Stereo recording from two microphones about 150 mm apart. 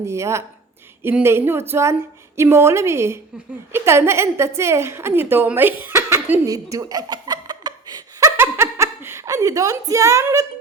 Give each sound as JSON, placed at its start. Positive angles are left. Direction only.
{"t": 0.0, "sound": "a woman's voice", "side_deg": -20}
{"t": 6.5, "sound": "chuckle", "side_deg": -25}
{"t": 8.4, "sound": "laughter", "side_deg": -15}